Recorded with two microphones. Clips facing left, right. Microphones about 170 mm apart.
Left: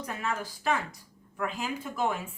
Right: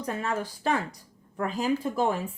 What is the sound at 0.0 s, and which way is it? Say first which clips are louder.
Speech: right 4 dB; 35° right (ahead or behind).